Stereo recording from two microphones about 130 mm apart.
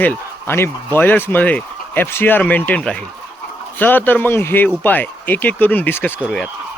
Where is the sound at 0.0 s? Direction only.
15° left (ahead or behind).